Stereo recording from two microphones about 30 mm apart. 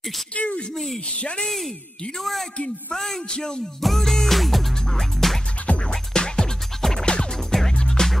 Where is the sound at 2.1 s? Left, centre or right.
Centre.